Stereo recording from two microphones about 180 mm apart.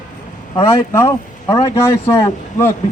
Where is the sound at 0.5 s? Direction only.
15° left (ahead or behind).